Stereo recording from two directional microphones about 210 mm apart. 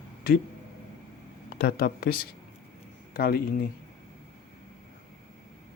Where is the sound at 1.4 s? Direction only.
50° left (ahead or behind).